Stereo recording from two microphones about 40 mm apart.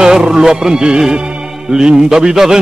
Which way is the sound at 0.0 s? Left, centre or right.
Centre.